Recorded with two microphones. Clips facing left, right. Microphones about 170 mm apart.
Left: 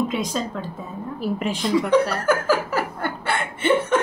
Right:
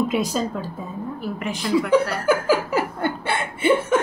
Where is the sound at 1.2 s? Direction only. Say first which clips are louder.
Left 6 dB; 30° left (ahead or behind).